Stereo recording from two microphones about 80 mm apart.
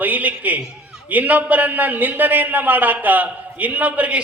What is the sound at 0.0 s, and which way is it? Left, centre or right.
A man's voice, right.